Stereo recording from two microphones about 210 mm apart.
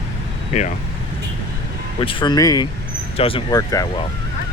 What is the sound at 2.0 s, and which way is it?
Speech, 25° left (ahead or behind).